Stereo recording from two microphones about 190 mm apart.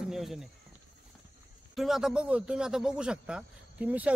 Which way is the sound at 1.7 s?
Centre (ahead or behind).